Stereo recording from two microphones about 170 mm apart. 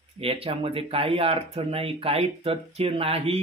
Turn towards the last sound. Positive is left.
turn(degrees=-35)  # may be behind; listen again after turning